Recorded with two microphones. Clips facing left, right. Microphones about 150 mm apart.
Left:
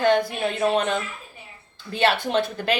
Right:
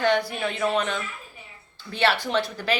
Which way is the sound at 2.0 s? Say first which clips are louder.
Left 2 dB; 50° left (ahead or behind).